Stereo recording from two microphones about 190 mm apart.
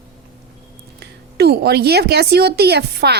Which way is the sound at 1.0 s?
60° right (ahead or behind).